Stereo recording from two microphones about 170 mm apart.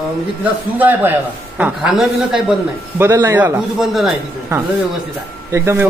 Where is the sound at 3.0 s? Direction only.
15° right (ahead or behind).